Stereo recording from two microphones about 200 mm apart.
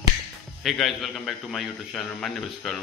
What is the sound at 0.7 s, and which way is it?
Speech, centre (ahead or behind).